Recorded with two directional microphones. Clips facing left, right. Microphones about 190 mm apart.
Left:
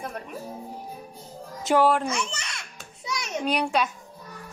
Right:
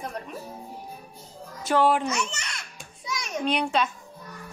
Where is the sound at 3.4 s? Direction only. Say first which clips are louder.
Even; centre (ahead or behind).